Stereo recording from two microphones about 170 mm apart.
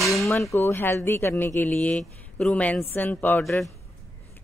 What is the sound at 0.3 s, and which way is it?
Speech, 15° left (ahead or behind).